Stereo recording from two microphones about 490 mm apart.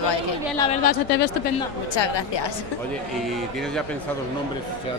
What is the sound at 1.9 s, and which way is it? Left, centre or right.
Speech, left.